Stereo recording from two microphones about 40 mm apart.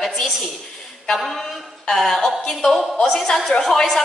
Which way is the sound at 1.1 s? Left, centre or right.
Centre.